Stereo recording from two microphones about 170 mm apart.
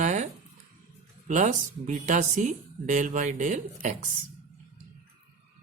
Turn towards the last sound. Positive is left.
turn(degrees=-45)  # may be behind; listen again after turning